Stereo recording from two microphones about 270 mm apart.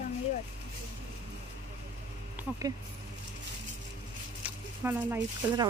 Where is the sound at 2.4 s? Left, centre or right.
Centre.